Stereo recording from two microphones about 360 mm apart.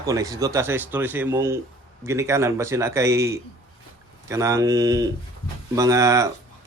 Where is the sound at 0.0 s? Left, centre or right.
Centre.